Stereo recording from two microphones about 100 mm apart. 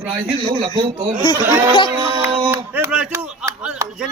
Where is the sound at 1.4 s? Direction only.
30° right (ahead or behind).